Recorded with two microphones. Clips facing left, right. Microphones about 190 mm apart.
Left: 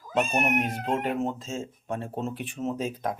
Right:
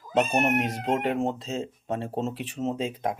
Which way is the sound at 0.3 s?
30° right (ahead or behind).